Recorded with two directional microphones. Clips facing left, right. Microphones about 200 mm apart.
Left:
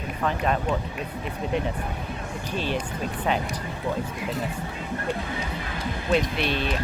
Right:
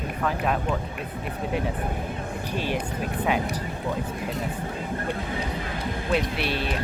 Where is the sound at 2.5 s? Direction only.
10° right (ahead or behind).